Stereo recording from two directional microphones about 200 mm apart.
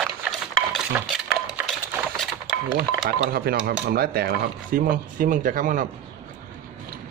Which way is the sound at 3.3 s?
50° right (ahead or behind).